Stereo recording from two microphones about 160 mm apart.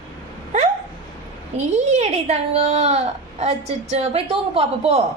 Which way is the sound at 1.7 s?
45° right (ahead or behind).